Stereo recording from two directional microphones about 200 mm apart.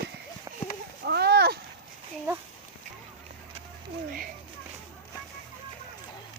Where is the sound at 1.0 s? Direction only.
55° right (ahead or behind).